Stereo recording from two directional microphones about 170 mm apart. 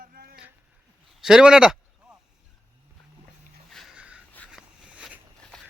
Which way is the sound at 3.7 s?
Centre (ahead or behind).